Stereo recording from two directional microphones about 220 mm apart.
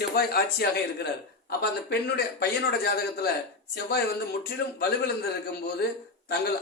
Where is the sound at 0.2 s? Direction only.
45° left (ahead or behind).